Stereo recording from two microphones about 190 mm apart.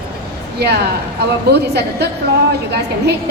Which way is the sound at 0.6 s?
60° right (ahead or behind).